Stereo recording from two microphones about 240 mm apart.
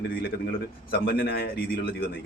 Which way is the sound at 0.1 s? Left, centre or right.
Left.